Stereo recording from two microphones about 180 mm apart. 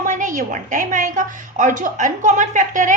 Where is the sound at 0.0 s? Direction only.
45° right (ahead or behind).